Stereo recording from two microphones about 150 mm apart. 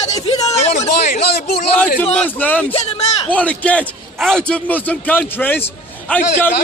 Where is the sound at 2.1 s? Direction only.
10° left (ahead or behind).